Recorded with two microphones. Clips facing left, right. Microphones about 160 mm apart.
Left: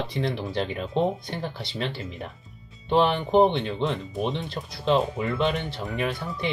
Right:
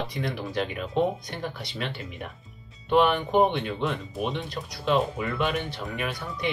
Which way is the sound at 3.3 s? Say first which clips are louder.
Left 3 dB; 30° left (ahead or behind).